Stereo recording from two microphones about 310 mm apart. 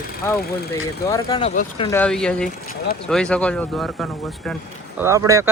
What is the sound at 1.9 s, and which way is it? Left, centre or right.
Speech, centre.